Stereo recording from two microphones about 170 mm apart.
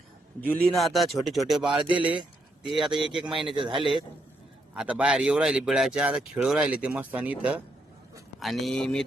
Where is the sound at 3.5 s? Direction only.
30° right (ahead or behind).